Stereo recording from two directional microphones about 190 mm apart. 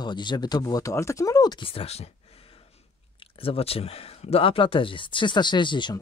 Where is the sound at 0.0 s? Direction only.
25° left (ahead or behind).